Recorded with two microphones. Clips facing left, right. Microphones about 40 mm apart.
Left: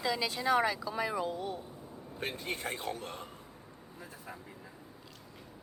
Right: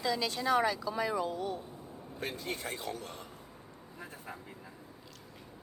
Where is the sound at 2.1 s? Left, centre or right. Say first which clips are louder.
Left 1 dB; left.